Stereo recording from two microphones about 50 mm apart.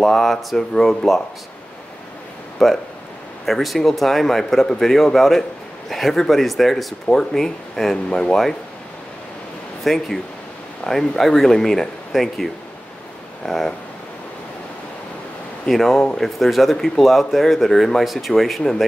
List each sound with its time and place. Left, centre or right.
0.0 s speech: centre
2.6 s speech: centre
9.8 s speech: centre
13.5 s speech: centre
15.7 s speech: centre